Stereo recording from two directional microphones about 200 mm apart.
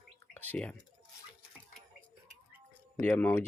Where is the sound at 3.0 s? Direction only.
10° left (ahead or behind).